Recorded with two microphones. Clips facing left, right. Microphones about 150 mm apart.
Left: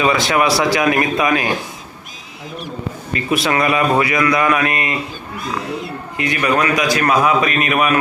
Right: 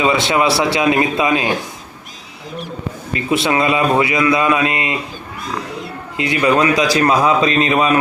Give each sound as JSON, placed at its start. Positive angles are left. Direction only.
{"t": 0.0, "sound": "a man's voice", "side_deg": -25}
{"t": 3.2, "sound": "a man's voice", "side_deg": -25}
{"t": 6.1, "sound": "a man's voice", "side_deg": -20}